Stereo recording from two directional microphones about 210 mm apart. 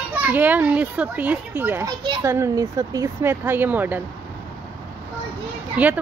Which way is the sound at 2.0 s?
20° right (ahead or behind).